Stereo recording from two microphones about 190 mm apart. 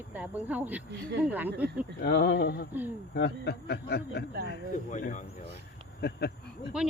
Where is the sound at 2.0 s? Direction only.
60° left (ahead or behind).